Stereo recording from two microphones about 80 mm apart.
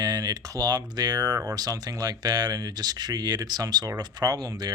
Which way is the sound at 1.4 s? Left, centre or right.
Right.